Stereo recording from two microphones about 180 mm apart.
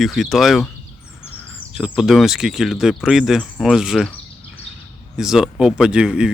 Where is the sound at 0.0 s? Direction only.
Centre (ahead or behind).